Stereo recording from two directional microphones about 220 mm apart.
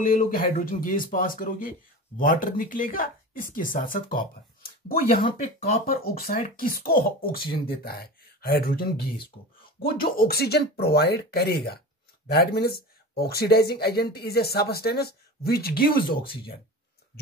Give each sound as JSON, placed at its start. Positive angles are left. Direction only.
{"t": 0.0, "sound": "speech", "side_deg": 40}